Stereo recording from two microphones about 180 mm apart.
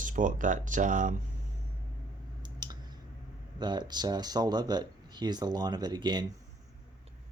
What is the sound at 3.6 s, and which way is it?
Speech, 25° right (ahead or behind).